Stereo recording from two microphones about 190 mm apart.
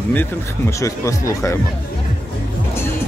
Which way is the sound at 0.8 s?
15° left (ahead or behind).